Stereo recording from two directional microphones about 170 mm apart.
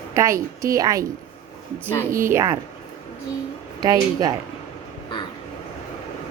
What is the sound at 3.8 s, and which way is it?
Speech, 20° right (ahead or behind).